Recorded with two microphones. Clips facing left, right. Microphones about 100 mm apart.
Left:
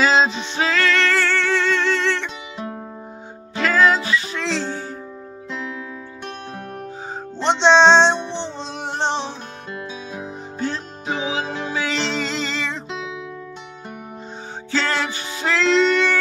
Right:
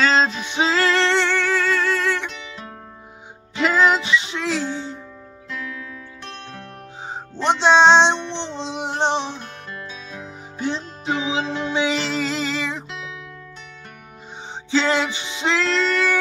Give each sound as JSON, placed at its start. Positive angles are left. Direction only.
{"t": 0.0, "sound": "music", "side_deg": 5}
{"t": 0.5, "sound": "music", "side_deg": -25}
{"t": 2.5, "sound": "music", "side_deg": 15}
{"t": 3.5, "sound": "music", "side_deg": -20}
{"t": 7.6, "sound": "music", "side_deg": -10}
{"t": 8.2, "sound": "music", "side_deg": 15}
{"t": 8.5, "sound": "music", "side_deg": -15}
{"t": 9.7, "sound": "music", "side_deg": 15}
{"t": 10.6, "sound": "music", "side_deg": -20}
{"t": 12.0, "sound": "music", "side_deg": -5}
{"t": 14.7, "sound": "music", "side_deg": -15}
{"t": 15.6, "sound": "music", "side_deg": 0}